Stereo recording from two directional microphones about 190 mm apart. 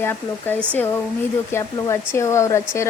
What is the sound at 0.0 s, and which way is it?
A woman's voice, 10° left (ahead or behind).